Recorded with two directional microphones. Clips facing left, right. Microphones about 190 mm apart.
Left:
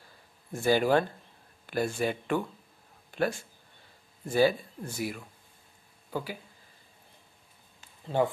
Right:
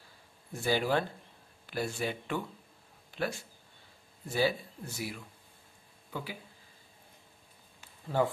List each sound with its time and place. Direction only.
0.5 s speech: 50° left (ahead or behind)
3.1 s a sound: 50° left (ahead or behind)
4.3 s speech: 50° left (ahead or behind)
8.1 s speech: 20° left (ahead or behind)